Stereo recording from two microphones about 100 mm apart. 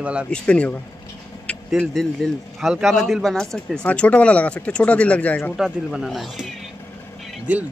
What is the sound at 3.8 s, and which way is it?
Speech, 15° left (ahead or behind).